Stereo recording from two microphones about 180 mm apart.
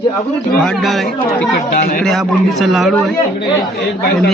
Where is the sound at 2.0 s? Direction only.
Centre (ahead or behind).